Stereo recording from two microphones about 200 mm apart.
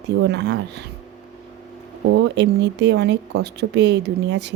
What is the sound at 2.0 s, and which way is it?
A woman's voice, 60° right (ahead or behind).